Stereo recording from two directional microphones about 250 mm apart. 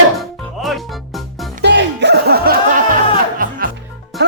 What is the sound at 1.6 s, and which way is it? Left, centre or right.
Music, right.